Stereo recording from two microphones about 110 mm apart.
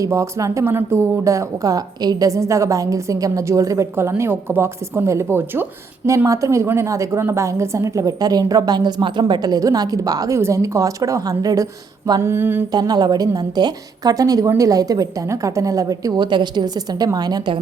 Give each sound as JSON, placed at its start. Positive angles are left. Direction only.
{"t": 0.0, "sound": "a woman's voice", "side_deg": -30}
{"t": 12.2, "sound": "a woman's voice", "side_deg": -20}
{"t": 12.7, "sound": "a woman's voice", "side_deg": -40}